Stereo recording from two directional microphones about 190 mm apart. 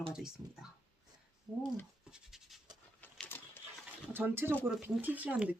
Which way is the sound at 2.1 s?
5° right (ahead or behind).